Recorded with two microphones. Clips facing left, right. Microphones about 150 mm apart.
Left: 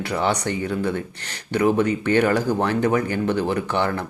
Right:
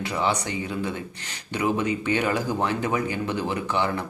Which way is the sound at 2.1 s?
55° left (ahead or behind).